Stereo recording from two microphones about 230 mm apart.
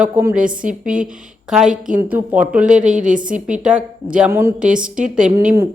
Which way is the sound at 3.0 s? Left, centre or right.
Right.